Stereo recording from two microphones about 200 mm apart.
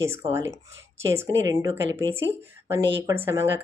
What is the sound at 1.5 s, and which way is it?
Speech, 15° right (ahead or behind).